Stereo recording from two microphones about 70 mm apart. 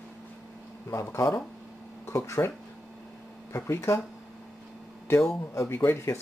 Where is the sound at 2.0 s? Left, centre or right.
Left.